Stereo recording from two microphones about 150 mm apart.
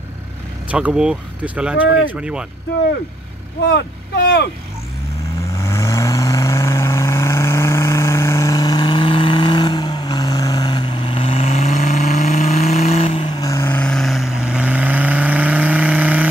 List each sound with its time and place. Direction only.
0.7 s speech: 10° right (ahead or behind)
5.6 s vehicle: 20° left (ahead or behind); by 16.3 s 10° right (ahead or behind)